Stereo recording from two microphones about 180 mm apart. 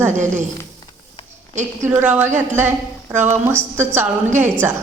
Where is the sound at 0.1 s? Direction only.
40° right (ahead or behind).